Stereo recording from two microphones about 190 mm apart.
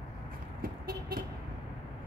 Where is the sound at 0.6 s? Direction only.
50° right (ahead or behind).